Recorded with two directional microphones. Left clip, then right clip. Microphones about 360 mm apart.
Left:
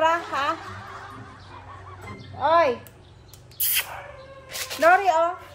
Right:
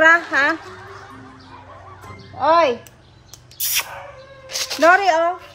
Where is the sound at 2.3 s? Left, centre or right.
Right.